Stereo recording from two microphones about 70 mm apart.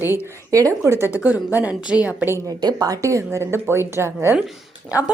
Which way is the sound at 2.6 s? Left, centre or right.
Right.